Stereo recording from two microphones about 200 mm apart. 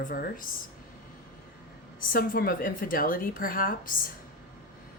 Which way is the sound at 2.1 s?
45° left (ahead or behind).